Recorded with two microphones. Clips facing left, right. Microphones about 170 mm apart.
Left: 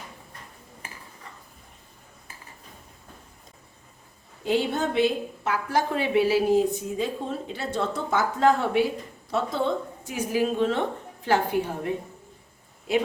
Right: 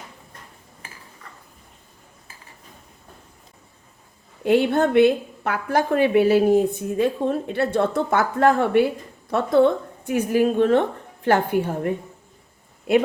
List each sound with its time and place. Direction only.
4.4 s a woman's voice: 60° right (ahead or behind)
12.9 s a woman's voice: 60° right (ahead or behind)